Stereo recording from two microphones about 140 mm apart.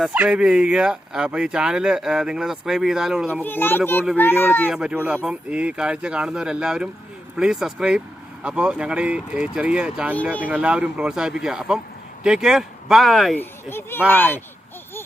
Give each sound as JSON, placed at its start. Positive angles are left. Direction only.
{"t": 0.1, "sound": "speech", "side_deg": -10}
{"t": 3.4, "sound": "speech", "side_deg": 15}
{"t": 4.7, "sound": "speech", "side_deg": -5}
{"t": 13.3, "sound": "speech", "side_deg": 15}